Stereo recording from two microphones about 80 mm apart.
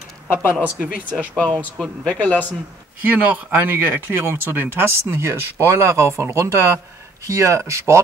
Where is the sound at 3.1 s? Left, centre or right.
Right.